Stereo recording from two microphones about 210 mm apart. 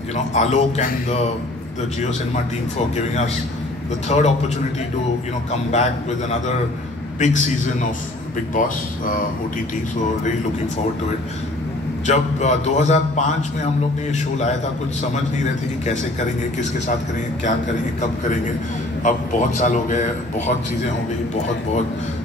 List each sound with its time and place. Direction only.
0.1 s a man's voice: 30° left (ahead or behind)
4.1 s a man's voice: 30° left (ahead or behind)
5.5 s a man's voice: 30° left (ahead or behind)
7.2 s a man's voice: 35° left (ahead or behind)
12.1 s a man's voice: 35° left (ahead or behind)
19.0 s a man's voice: 35° left (ahead or behind)